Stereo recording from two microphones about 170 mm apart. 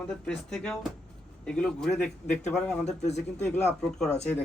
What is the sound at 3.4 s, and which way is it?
Speech, 5° left (ahead or behind).